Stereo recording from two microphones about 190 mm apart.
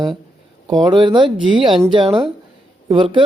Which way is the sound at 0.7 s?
20° right (ahead or behind).